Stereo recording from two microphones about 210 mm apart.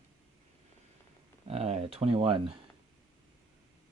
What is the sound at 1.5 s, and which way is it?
Speech, 30° right (ahead or behind).